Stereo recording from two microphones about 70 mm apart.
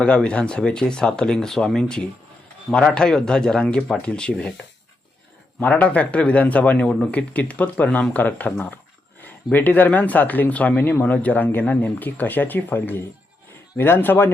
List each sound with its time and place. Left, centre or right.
0.0 s a man's voice: centre; by 14.3 s left